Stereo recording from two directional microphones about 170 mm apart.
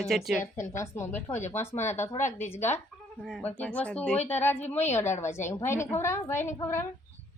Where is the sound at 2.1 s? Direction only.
45° left (ahead or behind).